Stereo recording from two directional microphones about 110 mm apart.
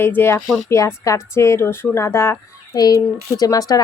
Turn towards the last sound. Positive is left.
turn(degrees=35)  # may be behind; listen again after turning